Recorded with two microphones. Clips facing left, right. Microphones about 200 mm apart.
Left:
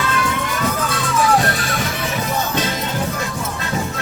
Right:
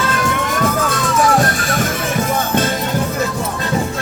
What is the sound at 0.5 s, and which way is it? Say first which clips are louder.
Music: right 4 dB; 45° right (ahead or behind).